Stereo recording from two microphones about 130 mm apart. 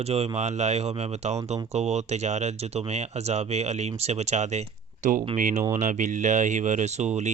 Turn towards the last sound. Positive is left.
turn(degrees=-60)  # may be behind; listen again after turning